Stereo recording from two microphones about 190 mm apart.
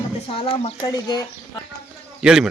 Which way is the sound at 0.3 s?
30° left (ahead or behind).